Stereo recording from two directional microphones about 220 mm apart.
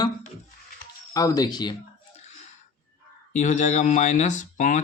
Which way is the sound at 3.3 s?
35° left (ahead or behind).